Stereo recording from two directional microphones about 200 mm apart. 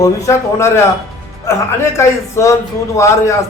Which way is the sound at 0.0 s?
15° left (ahead or behind).